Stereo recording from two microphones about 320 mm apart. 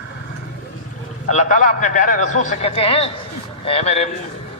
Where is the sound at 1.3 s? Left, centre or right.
Left.